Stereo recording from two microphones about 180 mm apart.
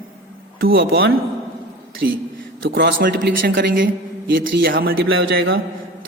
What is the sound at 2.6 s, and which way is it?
A man's voice, 65° right (ahead or behind).